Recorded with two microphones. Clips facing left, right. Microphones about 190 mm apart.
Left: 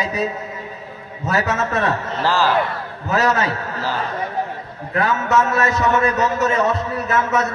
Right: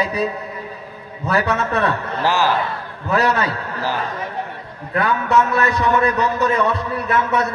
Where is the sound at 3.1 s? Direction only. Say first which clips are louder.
Even; 30° right (ahead or behind).